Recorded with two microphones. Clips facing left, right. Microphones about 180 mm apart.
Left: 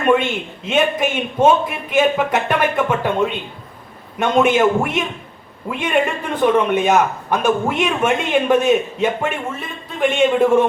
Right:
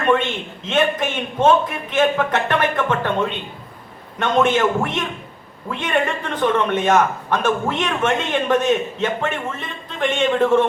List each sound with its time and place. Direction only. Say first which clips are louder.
0.0 s a man's voice: left 2 dB; 10° left (ahead or behind)